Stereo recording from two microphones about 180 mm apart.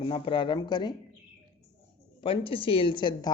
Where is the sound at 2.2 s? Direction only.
30° left (ahead or behind).